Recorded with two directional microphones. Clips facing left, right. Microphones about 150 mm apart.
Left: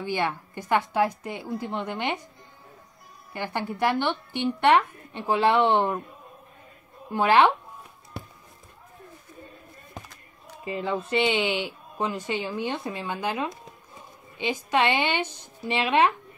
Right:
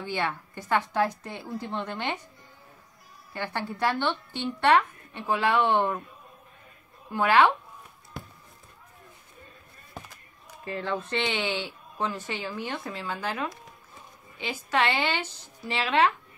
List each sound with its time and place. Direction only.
0.0 s speech: 15° left (ahead or behind)
3.3 s speech: 15° left (ahead or behind)
5.3 s speech: 25° left (ahead or behind)
5.7 s speech: 15° left (ahead or behind)
7.1 s speech: 20° left (ahead or behind)
10.6 s speech: 15° left (ahead or behind)